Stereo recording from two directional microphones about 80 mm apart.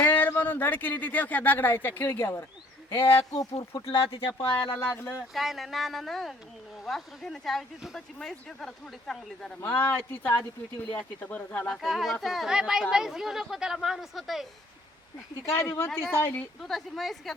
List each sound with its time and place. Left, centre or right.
0.0 s speech: left
3.3 s speech: left
3.7 s speech: left
5.3 s a woman's voice: centre
9.6 s speech: left
11.8 s a woman's voice: centre
15.4 s speech: left
16.6 s a woman's voice: centre